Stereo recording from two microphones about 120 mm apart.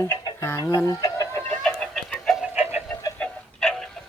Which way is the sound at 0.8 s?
30° left (ahead or behind).